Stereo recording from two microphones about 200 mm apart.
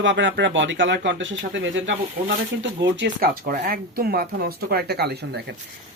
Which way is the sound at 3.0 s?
55° right (ahead or behind).